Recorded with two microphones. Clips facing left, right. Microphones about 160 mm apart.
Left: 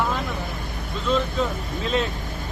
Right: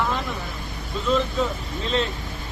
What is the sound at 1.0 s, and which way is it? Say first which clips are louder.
Speech: right 1 dB; centre (ahead or behind).